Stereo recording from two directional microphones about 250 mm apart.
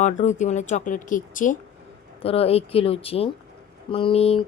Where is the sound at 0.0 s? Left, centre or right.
Left.